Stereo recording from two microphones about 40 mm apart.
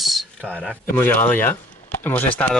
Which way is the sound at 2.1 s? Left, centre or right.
Left.